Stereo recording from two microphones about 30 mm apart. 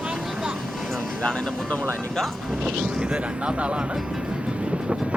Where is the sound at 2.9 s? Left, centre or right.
Right.